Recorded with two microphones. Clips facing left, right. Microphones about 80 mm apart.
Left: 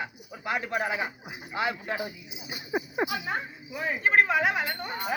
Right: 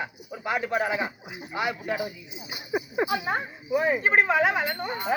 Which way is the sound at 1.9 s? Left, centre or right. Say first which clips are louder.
Right 3 dB; left.